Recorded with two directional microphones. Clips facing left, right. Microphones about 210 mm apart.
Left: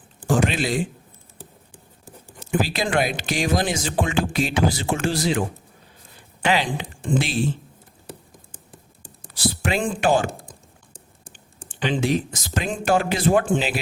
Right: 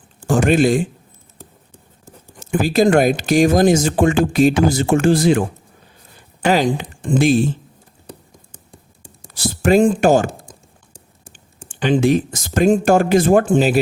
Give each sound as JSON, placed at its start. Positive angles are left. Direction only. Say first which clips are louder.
{"t": 0.3, "sound": "speech", "louder": "right 7 dB", "side_deg": -45}
{"t": 1.4, "sound": "writing", "louder": "right 1 dB", "side_deg": 15}
{"t": 2.4, "sound": "speech", "louder": "right 9 dB", "side_deg": -45}
{"t": 6.4, "sound": "speech", "louder": "right 6 dB", "side_deg": -45}
{"t": 8.5, "sound": "writing", "louder": "right 1 dB", "side_deg": 5}
{"t": 9.3, "sound": "speech", "louder": "right 10 dB", "side_deg": -45}
{"t": 11.7, "sound": "speech", "louder": "right 7 dB", "side_deg": -50}